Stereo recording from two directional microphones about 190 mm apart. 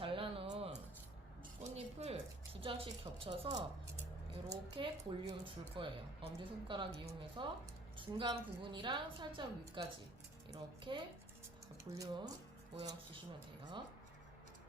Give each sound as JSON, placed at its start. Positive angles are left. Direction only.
{"t": 0.0, "sound": "a sound", "side_deg": -30}
{"t": 1.7, "sound": "music", "side_deg": -35}
{"t": 2.6, "sound": "a woman's voice", "side_deg": -30}